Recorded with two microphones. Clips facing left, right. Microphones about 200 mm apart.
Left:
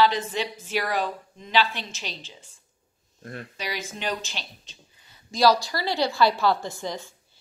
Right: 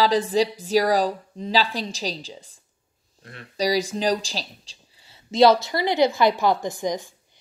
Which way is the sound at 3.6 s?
35° right (ahead or behind).